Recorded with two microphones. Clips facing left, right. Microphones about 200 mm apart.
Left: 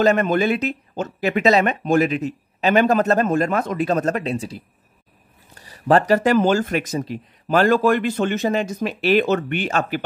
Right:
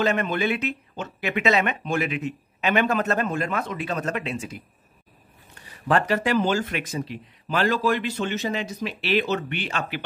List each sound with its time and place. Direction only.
0.0 s speech: 40° left (ahead or behind)